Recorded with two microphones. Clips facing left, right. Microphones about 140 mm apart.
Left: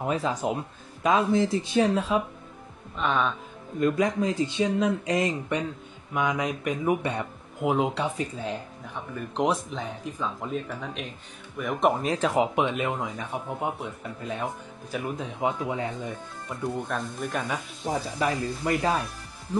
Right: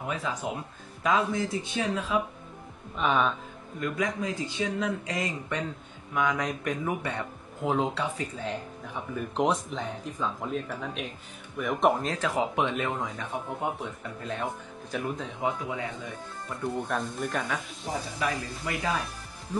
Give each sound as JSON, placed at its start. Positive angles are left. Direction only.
{"t": 0.1, "sound": "speech", "side_deg": 35}
{"t": 3.0, "sound": "speech", "side_deg": 0}
{"t": 3.8, "sound": "speech", "side_deg": 30}
{"t": 6.9, "sound": "speech", "side_deg": 20}
{"t": 8.9, "sound": "speech", "side_deg": -5}
{"t": 12.2, "sound": "speech", "side_deg": 25}
{"t": 12.5, "sound": "speech", "side_deg": 10}
{"t": 15.4, "sound": "speech", "side_deg": 30}
{"t": 16.4, "sound": "speech", "side_deg": 0}
{"t": 18.2, "sound": "speech", "side_deg": 20}